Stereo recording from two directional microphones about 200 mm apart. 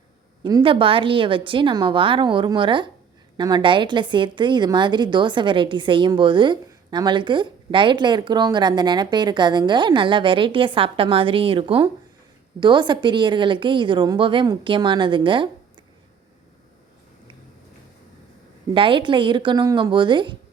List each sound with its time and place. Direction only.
0.4 s a woman's voice: 25° right (ahead or behind)
18.7 s a woman's voice: 25° right (ahead or behind)